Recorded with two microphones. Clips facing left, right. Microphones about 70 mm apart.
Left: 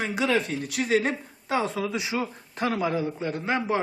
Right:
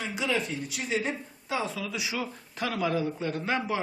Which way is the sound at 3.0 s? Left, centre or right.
Centre.